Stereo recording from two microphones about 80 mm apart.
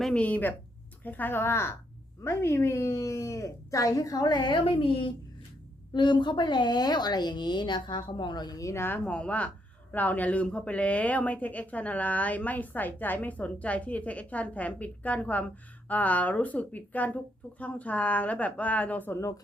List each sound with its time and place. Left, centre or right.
0.0 s speech: centre; by 5.1 s left
5.9 s speech: left
8.7 s speech: left
9.0 s speech: centre